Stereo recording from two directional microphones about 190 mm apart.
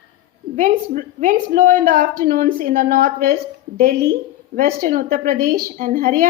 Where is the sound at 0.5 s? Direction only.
40° right (ahead or behind).